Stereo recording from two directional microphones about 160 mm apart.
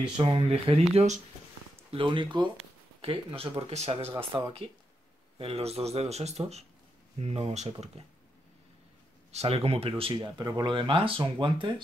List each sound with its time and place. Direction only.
0.2 s speech: 35° right (ahead or behind)
1.9 s speech: 30° right (ahead or behind)
9.3 s speech: 40° right (ahead or behind)